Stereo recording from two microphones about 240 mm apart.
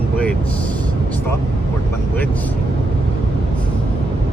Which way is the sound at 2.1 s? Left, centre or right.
Centre.